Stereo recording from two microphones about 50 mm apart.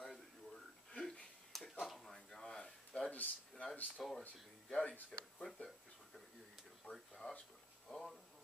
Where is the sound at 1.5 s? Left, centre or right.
Centre.